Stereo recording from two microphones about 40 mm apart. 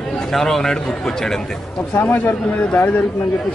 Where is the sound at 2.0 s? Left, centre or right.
Left.